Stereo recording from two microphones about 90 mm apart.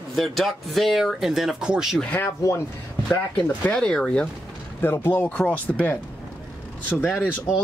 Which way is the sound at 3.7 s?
10° left (ahead or behind).